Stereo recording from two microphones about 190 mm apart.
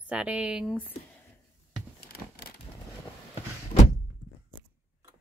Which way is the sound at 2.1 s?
55° left (ahead or behind).